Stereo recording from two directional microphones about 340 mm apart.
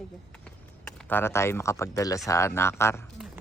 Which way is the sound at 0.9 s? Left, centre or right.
Centre.